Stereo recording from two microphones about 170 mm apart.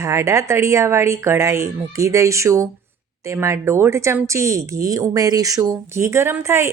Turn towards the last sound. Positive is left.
turn(degrees=-15)  # may be behind; listen again after turning